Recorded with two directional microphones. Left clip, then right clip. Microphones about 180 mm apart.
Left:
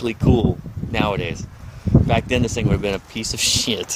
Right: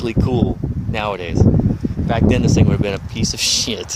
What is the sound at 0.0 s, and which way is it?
Speech, 15° right (ahead or behind).